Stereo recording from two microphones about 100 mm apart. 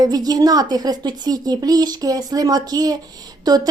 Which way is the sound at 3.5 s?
45° right (ahead or behind).